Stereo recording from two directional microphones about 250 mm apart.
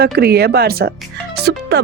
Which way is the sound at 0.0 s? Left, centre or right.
Right.